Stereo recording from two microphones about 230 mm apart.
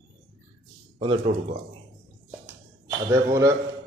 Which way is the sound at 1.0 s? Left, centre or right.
Right.